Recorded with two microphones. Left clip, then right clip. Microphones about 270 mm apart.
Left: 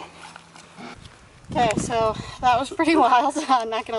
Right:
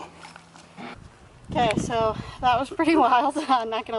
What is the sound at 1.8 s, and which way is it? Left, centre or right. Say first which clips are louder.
Speech: left 2 dB; centre.